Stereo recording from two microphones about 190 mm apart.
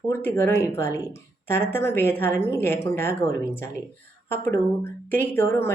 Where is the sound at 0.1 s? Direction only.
10° left (ahead or behind).